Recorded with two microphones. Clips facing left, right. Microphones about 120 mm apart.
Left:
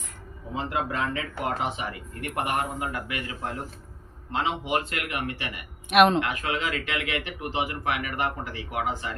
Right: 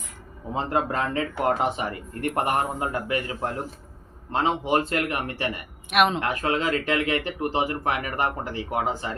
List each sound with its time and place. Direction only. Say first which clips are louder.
0.5 s speech: right 4 dB; 40° right (ahead or behind)
5.9 s speech: left 3 dB; centre (ahead or behind)
6.1 s speech: right 2 dB; 35° right (ahead or behind)